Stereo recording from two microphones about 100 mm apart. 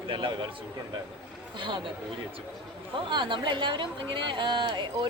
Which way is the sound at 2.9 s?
55° right (ahead or behind).